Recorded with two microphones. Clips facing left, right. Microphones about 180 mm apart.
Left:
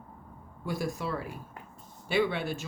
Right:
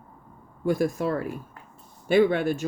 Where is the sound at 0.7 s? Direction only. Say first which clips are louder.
Right 9 dB; 50° right (ahead or behind).